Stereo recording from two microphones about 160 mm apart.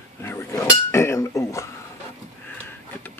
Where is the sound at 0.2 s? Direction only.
15° left (ahead or behind).